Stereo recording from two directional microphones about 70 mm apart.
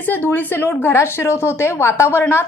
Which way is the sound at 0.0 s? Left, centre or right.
Left.